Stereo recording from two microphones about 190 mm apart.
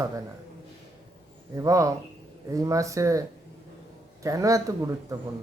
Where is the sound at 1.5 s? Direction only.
15° right (ahead or behind).